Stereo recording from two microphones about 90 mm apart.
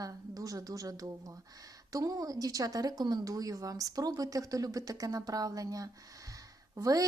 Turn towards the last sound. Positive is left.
turn(degrees=-40)  # may be behind; listen again after turning